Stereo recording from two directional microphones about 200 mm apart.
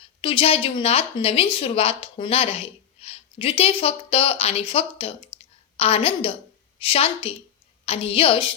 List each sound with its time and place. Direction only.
0.2 s a woman's voice: 25° left (ahead or behind)